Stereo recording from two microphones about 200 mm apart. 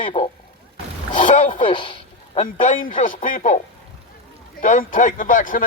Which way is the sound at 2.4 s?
40° left (ahead or behind).